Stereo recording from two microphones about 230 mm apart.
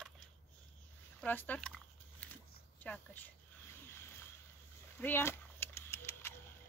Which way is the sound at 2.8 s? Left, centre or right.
Centre.